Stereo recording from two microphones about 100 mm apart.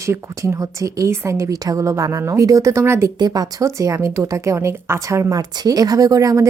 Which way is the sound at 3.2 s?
35° right (ahead or behind).